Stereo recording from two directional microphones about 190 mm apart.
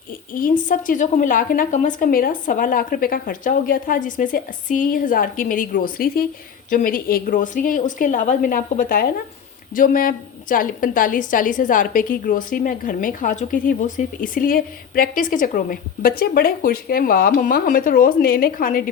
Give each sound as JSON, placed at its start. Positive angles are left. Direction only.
{"t": 0.3, "sound": "a woman's voice", "side_deg": 45}